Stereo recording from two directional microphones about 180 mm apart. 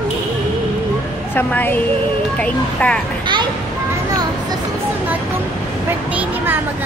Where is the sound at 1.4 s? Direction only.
10° left (ahead or behind).